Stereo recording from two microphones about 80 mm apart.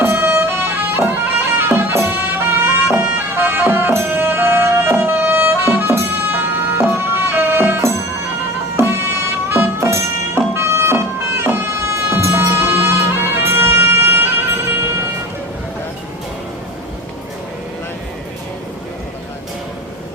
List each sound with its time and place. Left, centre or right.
0.0 s music: right
12.6 s music: right